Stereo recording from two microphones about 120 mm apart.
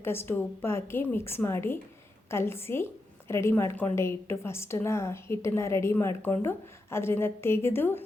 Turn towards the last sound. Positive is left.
turn(degrees=20)  # may be behind; listen again after turning